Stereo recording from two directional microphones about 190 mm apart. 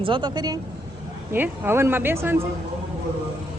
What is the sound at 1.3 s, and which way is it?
Speech, 10° right (ahead or behind).